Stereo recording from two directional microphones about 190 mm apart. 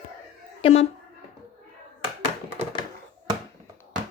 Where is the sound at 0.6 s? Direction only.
30° left (ahead or behind).